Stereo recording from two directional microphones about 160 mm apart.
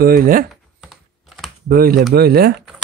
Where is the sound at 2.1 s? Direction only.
80° right.